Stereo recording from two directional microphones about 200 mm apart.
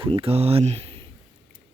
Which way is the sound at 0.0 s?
30° right (ahead or behind).